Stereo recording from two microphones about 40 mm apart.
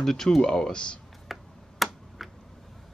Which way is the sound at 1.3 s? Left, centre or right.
Centre.